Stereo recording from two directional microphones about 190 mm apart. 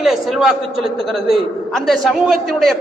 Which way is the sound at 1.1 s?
Centre (ahead or behind).